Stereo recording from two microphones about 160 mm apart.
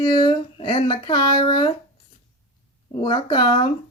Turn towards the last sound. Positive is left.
turn(degrees=30)  # may be behind; listen again after turning